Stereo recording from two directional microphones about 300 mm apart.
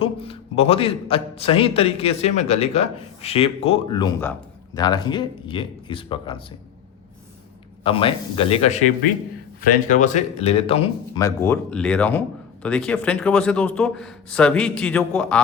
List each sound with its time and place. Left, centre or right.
0.0 s a man's voice: centre
7.9 s a man's voice: centre